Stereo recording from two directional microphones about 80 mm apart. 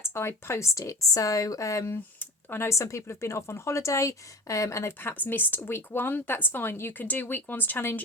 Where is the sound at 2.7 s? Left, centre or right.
Left.